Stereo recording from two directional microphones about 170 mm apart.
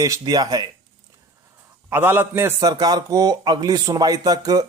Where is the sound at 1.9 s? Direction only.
10° right (ahead or behind).